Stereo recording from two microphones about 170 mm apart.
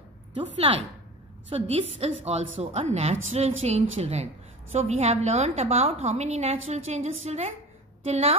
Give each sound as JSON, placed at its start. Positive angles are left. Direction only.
{"t": 0.6, "sound": "a woman's voice", "side_deg": -35}